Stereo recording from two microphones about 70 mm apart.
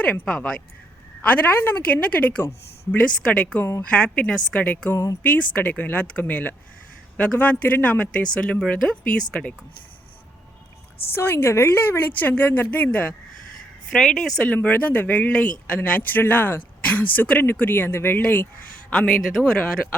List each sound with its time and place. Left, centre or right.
0.0 s a woman's voice: centre
1.2 s a woman's voice: left
3.4 s speech: left
3.8 s a woman's voice: centre
4.7 s a woman's voice: left
11.1 s speech: left
13.9 s a woman's voice: centre
14.5 s speech: left
18.9 s a woman's voice: centre